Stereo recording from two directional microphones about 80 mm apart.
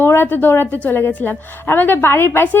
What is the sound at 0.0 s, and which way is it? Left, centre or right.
A woman's voice, left.